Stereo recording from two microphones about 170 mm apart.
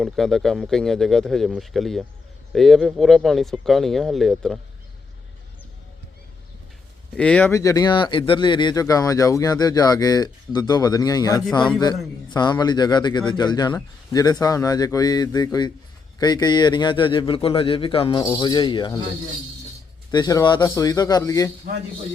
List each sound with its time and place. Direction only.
0.0 s speech: centre (ahead or behind)
7.2 s speech: 5° left (ahead or behind); by 18.9 s 25° left (ahead or behind)
20.1 s speech: 20° left (ahead or behind)